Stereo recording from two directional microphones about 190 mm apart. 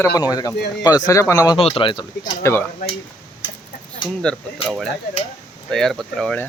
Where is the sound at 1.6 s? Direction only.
30° left (ahead or behind).